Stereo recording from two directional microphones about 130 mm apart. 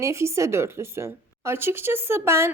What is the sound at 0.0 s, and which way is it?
A woman's voice, 20° right (ahead or behind).